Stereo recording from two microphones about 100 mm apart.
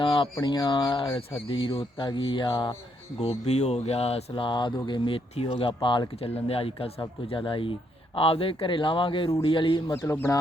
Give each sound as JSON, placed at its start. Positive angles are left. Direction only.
{"t": 0.0, "sound": "a sound", "side_deg": 55}
{"t": 0.4, "sound": "speech", "side_deg": 50}
{"t": 3.2, "sound": "speech", "side_deg": 90}
{"t": 4.4, "sound": "speech", "side_deg": 50}
{"t": 7.3, "sound": "speech", "side_deg": 60}
{"t": 10.1, "sound": "speech", "side_deg": 25}